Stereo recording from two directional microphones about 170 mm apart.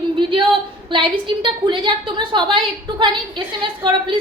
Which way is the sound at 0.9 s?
30° right (ahead or behind).